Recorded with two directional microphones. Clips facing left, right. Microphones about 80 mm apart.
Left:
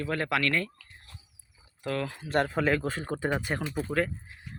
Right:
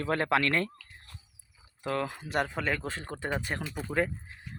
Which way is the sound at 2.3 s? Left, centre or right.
Centre.